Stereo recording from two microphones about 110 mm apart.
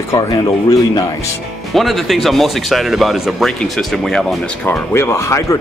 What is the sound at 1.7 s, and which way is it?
Speech, centre (ahead or behind).